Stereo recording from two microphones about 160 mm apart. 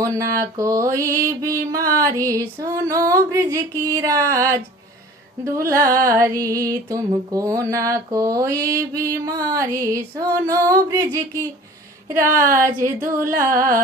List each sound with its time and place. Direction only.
0.0 s mantra: 20° right (ahead or behind)
12.5 s a sound: 20° right (ahead or behind)
13.2 s music: 60° right (ahead or behind)